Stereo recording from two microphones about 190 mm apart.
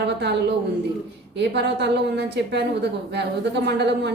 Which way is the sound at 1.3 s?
65° right (ahead or behind).